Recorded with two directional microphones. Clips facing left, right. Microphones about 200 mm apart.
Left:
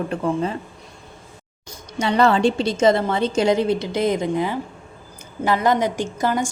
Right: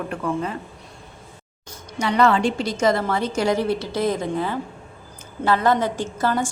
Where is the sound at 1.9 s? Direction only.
30° left (ahead or behind).